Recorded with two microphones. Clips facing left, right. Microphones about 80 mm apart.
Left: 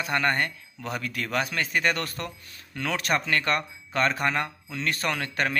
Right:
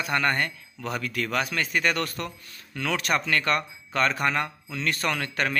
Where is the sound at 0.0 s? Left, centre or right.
Left.